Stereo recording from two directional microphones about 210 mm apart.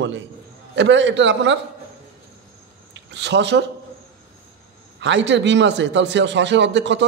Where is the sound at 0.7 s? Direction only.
60° right (ahead or behind).